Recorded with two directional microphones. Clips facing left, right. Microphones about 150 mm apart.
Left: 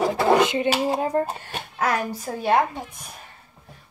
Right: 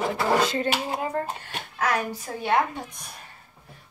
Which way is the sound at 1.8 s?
40° left (ahead or behind).